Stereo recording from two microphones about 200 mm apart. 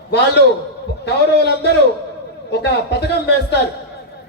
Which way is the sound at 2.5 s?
55° left (ahead or behind).